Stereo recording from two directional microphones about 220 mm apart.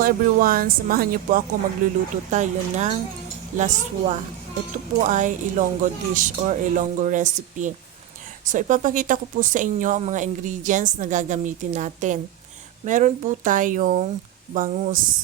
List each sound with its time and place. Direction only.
0.0 s speech: 40° right (ahead or behind)